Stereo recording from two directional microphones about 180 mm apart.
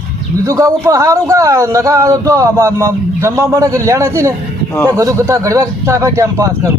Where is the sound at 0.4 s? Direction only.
20° right (ahead or behind).